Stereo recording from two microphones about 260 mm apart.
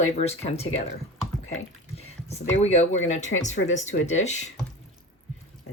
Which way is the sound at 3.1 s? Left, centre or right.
Left.